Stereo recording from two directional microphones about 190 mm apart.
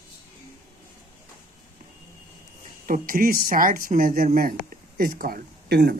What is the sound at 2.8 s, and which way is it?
Speech, 45° right (ahead or behind).